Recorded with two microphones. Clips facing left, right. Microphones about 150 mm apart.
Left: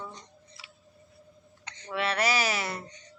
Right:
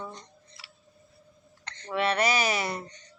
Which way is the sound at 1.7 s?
10° left (ahead or behind).